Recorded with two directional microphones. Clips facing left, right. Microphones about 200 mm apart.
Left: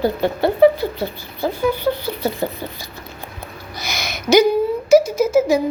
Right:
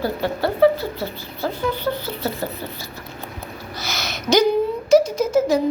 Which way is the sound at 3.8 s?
15° left (ahead or behind).